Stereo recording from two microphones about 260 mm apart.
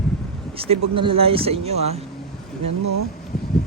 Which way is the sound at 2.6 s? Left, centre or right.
Right.